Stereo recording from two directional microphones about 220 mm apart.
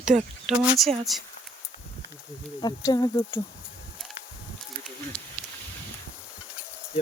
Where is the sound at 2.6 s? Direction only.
20° left (ahead or behind).